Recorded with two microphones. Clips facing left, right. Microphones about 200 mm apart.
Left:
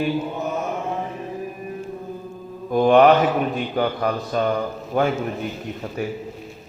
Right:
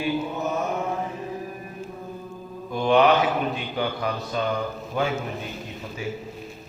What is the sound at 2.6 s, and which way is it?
Mantra, 50° left (ahead or behind).